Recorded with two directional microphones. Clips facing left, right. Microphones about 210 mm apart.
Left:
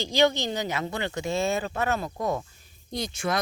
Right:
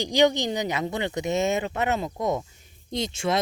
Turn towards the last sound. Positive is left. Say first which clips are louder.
# right 3 dB
turn(degrees=-25)  # may be behind; listen again after turning